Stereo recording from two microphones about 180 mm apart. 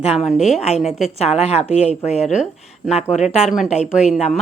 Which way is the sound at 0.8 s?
Centre (ahead or behind).